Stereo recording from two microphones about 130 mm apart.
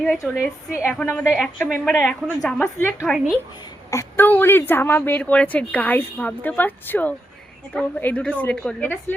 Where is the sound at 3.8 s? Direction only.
20° left (ahead or behind).